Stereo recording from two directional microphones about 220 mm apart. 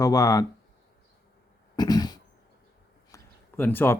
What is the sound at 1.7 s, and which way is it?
Cough, 20° left (ahead or behind).